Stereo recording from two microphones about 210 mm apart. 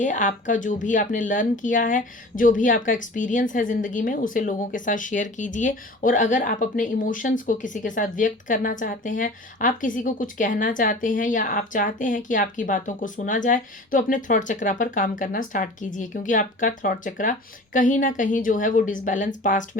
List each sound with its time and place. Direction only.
0.0 s speech: 35° left (ahead or behind)